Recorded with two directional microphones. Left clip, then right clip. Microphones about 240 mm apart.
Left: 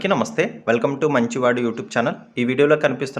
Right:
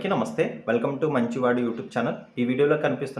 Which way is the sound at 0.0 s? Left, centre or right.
Left.